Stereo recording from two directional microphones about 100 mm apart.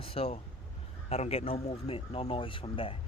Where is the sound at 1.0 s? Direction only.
90° left; by 2.9 s 65° left (ahead or behind).